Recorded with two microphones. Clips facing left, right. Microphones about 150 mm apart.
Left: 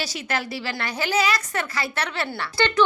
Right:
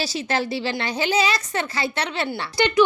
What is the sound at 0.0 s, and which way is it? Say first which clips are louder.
A woman's voice: right 4 dB; 30° right (ahead or behind).